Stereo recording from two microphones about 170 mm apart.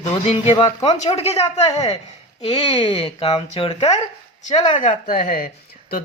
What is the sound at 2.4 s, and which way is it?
Speech, 25° left (ahead or behind).